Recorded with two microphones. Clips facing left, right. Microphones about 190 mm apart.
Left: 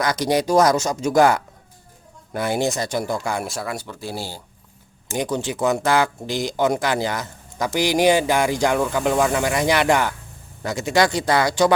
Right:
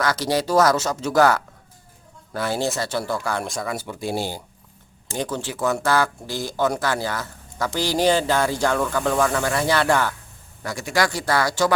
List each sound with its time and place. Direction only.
0.0 s speech: 15° left (ahead or behind)
3.4 s speech: 5° left (ahead or behind)
3.8 s speech: 20° right (ahead or behind)
5.1 s speech: 15° left (ahead or behind)